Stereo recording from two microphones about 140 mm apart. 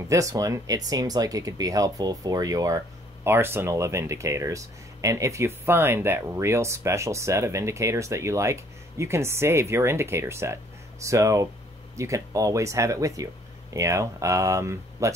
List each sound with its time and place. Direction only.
0.1 s speech: 25° right (ahead or behind)